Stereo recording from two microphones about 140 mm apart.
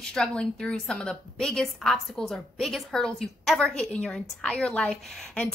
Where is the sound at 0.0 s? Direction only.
5° left (ahead or behind).